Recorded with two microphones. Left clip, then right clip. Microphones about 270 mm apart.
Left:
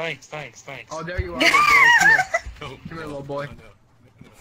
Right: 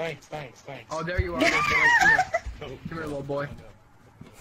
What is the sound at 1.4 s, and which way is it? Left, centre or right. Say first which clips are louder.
Speech: left 7 dB; left.